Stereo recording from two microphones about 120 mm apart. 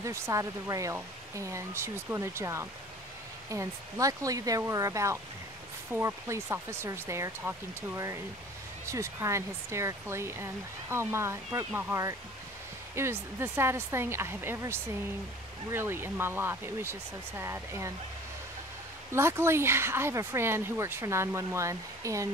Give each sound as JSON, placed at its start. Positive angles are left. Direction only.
{"t": 0.0, "sound": "speech", "side_deg": -25}
{"t": 19.1, "sound": "speech", "side_deg": -20}